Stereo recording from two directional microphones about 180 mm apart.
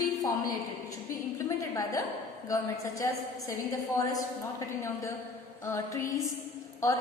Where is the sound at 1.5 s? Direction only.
15° left (ahead or behind).